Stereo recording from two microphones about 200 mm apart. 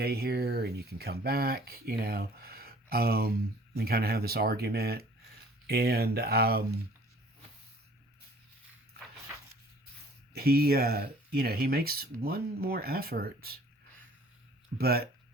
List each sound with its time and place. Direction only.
0.0 s speech: 50° right (ahead or behind)
10.3 s speech: 50° right (ahead or behind)
14.8 s speech: 50° right (ahead or behind)